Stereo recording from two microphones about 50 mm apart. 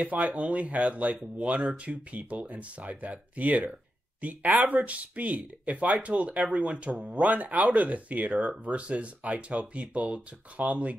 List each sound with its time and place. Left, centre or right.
0.0 s speech: right